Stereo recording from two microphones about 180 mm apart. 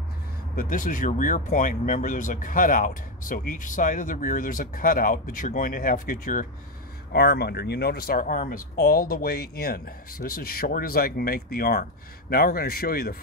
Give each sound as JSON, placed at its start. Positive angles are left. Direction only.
{"t": 0.6, "sound": "speech", "side_deg": 50}
{"t": 7.1, "sound": "speech", "side_deg": 65}